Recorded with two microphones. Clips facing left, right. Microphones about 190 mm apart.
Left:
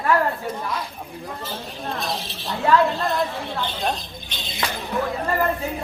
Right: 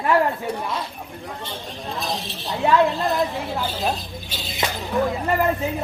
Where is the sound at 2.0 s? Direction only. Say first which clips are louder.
Right 1 dB; centre (ahead or behind).